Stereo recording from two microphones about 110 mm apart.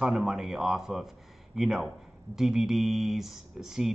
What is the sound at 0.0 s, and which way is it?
Speech, 5° right (ahead or behind).